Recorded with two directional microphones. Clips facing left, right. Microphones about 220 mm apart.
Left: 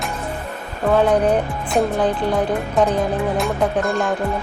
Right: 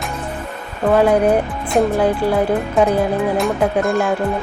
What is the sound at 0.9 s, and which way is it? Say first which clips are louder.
Speech: right 2 dB; 5° right (ahead or behind).